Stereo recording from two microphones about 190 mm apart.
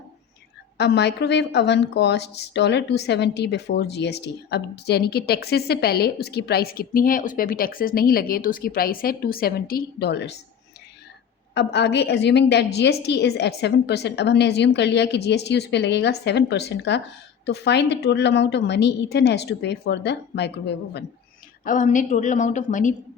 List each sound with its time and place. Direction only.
0.8 s a woman's voice: 60° left (ahead or behind)
11.5 s a woman's voice: 65° left (ahead or behind)
21.6 s a woman's voice: 45° left (ahead or behind)